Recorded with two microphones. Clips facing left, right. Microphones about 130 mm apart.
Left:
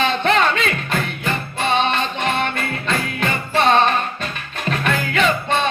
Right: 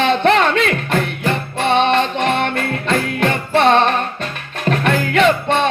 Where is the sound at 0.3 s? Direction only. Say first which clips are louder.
Right 3 dB; 60° right (ahead or behind).